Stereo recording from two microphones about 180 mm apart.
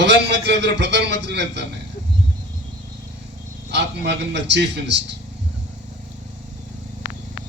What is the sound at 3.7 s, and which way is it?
A man's voice, 70° right (ahead or behind).